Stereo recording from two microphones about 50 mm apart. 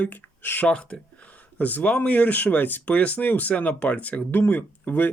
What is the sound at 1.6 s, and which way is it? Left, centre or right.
Speech, left.